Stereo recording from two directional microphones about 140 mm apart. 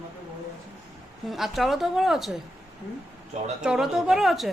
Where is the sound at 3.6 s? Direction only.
5° right (ahead or behind).